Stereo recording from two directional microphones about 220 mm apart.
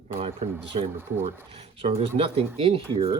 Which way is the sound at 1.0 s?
10° right (ahead or behind).